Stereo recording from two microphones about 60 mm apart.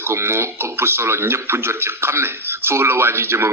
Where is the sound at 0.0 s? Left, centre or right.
Right.